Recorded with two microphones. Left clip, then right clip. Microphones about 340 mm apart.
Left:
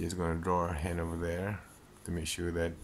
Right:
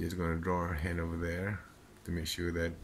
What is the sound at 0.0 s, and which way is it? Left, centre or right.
Speech, centre.